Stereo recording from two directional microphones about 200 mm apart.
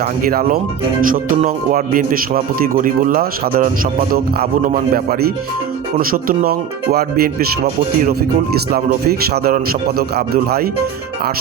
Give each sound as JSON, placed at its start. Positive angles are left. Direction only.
{"t": 0.3, "sound": "speech", "side_deg": -45}